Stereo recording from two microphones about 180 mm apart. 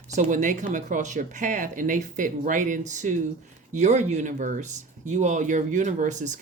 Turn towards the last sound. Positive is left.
turn(degrees=-40)  # may be behind; listen again after turning